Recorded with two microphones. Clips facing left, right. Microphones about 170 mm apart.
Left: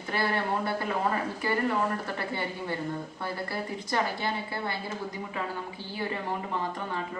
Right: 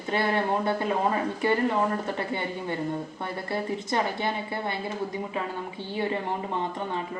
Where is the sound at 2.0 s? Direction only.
20° right (ahead or behind).